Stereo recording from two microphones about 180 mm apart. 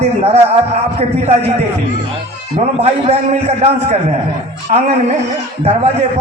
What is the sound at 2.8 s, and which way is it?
A man's voice, 35° right (ahead or behind).